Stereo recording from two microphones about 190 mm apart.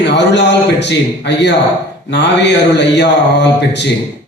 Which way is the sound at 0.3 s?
65° left (ahead or behind).